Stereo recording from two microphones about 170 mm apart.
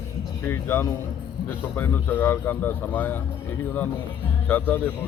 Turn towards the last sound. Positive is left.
turn(degrees=10)  # may be behind; listen again after turning